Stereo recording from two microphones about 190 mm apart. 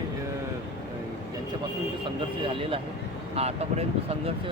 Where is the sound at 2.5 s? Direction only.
30° right (ahead or behind).